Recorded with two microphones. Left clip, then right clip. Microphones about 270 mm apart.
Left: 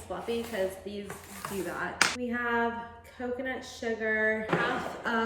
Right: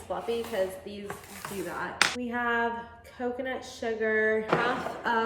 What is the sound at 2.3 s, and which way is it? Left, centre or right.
Speech, centre.